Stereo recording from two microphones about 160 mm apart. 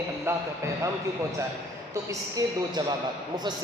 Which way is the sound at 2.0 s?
25° right (ahead or behind).